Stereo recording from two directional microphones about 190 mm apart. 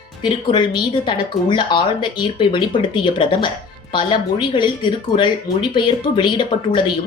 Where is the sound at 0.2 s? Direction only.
25° left (ahead or behind).